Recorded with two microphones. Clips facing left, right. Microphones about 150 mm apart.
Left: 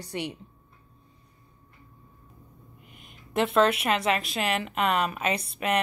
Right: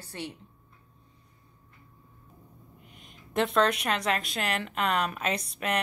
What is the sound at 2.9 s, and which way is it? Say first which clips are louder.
A woman's voice: left 1 dB; 5° left (ahead or behind).